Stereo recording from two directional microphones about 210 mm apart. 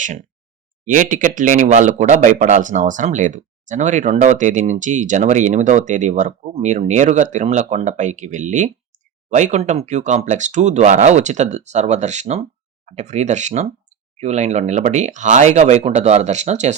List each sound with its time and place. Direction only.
0.9 s speech: 40° right (ahead or behind)